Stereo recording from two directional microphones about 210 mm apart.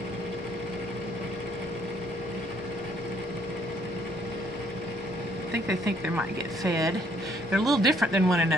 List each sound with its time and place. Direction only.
5.5 s speech: 55° right (ahead or behind)
7.5 s speech: centre (ahead or behind)